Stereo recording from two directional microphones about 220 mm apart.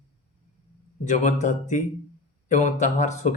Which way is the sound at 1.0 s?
35° left (ahead or behind).